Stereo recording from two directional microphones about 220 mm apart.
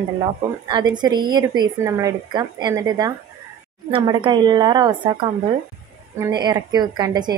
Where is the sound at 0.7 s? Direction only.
20° right (ahead or behind).